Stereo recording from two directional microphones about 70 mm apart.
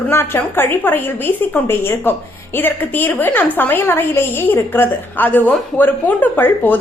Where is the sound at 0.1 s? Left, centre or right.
Left.